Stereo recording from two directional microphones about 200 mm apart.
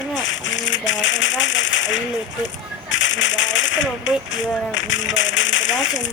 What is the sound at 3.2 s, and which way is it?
Speech, 65° left (ahead or behind).